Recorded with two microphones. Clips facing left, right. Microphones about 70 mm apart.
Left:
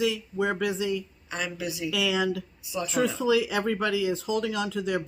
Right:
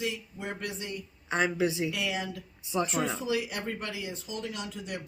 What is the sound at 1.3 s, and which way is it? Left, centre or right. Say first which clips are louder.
Speech: right 5 dB; right.